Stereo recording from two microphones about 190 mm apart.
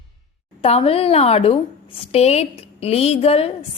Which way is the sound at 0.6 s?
30° left (ahead or behind).